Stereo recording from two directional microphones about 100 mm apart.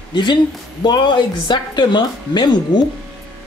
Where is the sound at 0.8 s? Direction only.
50° left (ahead or behind).